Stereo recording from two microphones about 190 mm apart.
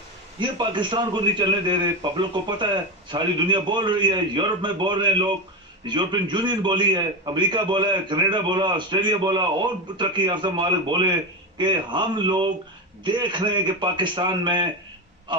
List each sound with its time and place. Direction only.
0.4 s a man's voice: 25° right (ahead or behind)